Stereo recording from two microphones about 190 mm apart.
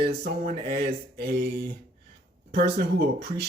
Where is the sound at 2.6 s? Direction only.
55° right (ahead or behind).